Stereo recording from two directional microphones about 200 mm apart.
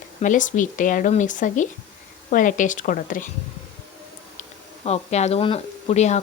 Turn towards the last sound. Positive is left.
turn(degrees=35)  # may be behind; listen again after turning